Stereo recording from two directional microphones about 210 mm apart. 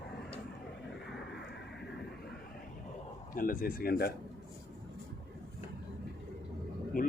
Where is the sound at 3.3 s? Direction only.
45° left (ahead or behind).